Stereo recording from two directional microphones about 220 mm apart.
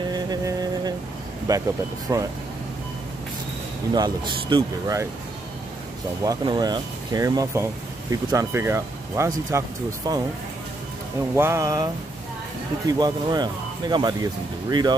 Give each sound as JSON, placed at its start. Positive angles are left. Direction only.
{"t": 0.1, "sound": "vehicle", "side_deg": -15}
{"t": 1.5, "sound": "speech", "side_deg": -15}
{"t": 3.9, "sound": "speech", "side_deg": -20}
{"t": 6.2, "sound": "speech", "side_deg": -20}
{"t": 11.3, "sound": "speech", "side_deg": -10}